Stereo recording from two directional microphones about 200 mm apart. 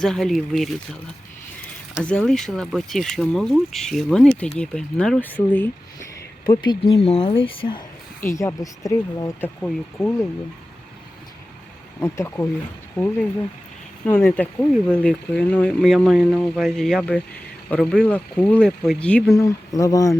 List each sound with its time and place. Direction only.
0.0 s speech: centre (ahead or behind)
2.0 s speech: 5° left (ahead or behind)
6.4 s speech: 20° left (ahead or behind)
8.3 s speech: 15° left (ahead or behind)
9.6 s speech: 5° left (ahead or behind)
11.9 s speech: 15° left (ahead or behind)
14.0 s speech: 10° left (ahead or behind)
19.3 s speech: 15° left (ahead or behind)